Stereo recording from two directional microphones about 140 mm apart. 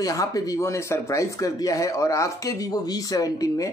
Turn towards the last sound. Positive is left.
turn(degrees=25)  # may be behind; listen again after turning